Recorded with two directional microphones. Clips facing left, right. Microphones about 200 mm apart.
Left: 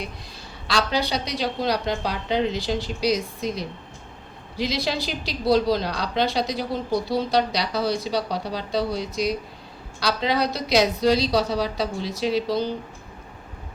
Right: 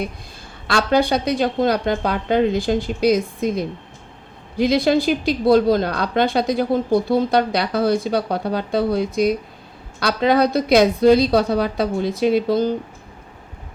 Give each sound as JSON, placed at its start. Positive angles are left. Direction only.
{"t": 0.7, "sound": "a woman's voice", "side_deg": -50}